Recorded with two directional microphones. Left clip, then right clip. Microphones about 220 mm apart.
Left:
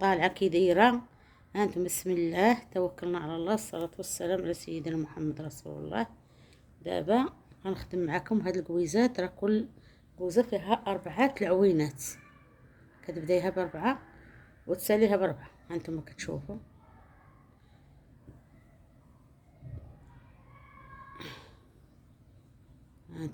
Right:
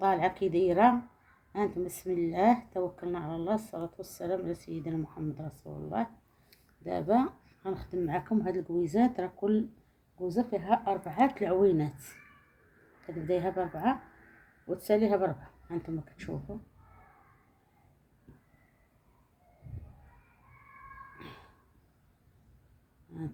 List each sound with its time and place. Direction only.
0.0 s a woman's voice: 30° left (ahead or behind)
13.1 s speech: 30° left (ahead or behind)
21.2 s cat: 30° left (ahead or behind)